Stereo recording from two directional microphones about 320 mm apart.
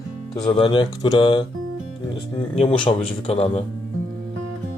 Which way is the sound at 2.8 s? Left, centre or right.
Centre.